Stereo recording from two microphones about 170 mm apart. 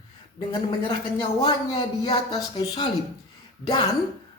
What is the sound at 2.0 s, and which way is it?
A man's voice, 25° left (ahead or behind).